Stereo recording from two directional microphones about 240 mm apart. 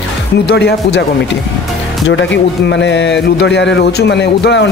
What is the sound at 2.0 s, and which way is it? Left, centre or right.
Speech, left.